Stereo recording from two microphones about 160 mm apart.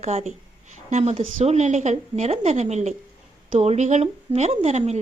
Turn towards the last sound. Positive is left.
turn(degrees=-45)  # may be behind; listen again after turning